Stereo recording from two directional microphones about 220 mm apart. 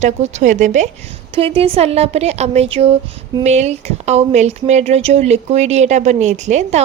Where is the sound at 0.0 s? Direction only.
30° right (ahead or behind).